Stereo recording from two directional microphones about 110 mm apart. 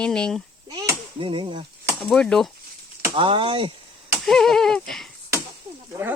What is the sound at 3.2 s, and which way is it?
Speech, 50° right (ahead or behind).